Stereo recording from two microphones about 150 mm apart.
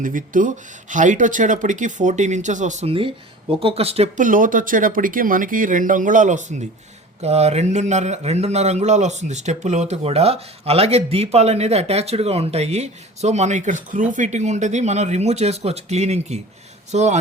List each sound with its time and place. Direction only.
0.0 s speech: 65° right (ahead or behind); by 4.1 s 40° right (ahead or behind)
4.2 s a man's voice: 65° right (ahead or behind)